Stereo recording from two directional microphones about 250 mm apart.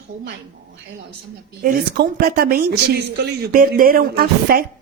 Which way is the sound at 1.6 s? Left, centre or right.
Right.